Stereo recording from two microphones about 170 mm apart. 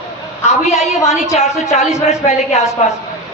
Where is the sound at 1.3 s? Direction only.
40° left (ahead or behind).